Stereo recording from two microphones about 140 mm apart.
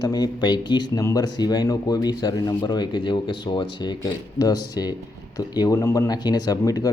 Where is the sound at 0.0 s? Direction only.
30° left (ahead or behind).